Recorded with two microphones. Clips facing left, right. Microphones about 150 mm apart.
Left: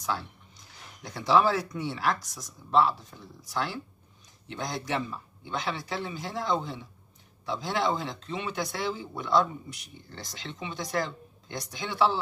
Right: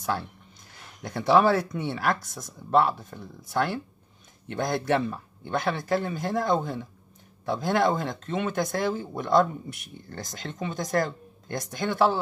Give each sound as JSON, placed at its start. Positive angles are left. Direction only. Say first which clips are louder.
{"t": 0.7, "sound": "speech", "louder": "right 5 dB", "side_deg": -55}